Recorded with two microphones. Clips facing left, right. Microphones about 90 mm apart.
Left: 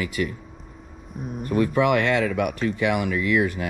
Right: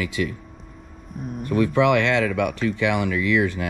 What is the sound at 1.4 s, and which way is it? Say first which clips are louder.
Speech: right 1 dB; 40° left (ahead or behind).